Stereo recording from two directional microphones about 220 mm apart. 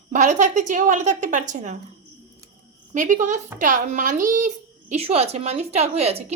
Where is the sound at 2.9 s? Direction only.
35° right (ahead or behind).